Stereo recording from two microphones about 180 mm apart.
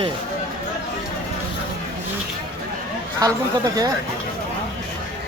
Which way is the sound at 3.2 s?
20° right (ahead or behind).